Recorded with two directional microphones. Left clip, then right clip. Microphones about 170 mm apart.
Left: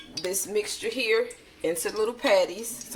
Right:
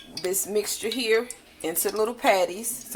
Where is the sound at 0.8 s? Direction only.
35° right (ahead or behind).